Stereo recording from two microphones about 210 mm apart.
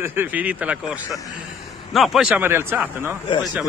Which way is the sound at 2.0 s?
Centre (ahead or behind).